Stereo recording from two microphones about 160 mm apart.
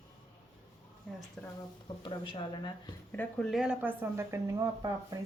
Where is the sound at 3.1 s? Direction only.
10° left (ahead or behind).